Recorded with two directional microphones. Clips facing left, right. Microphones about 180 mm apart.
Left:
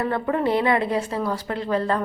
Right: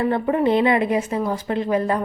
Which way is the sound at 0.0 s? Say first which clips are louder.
Right 3 dB; 20° right (ahead or behind).